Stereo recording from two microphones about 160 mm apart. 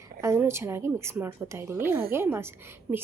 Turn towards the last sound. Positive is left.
turn(degrees=-10)  # may be behind; listen again after turning